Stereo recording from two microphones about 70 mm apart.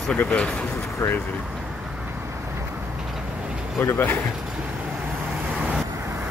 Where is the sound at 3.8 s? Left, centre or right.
Left.